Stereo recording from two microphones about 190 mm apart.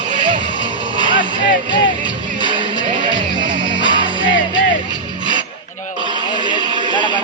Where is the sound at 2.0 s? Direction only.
25° right (ahead or behind).